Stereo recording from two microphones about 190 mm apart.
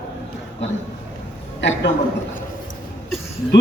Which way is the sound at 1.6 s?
70° left (ahead or behind).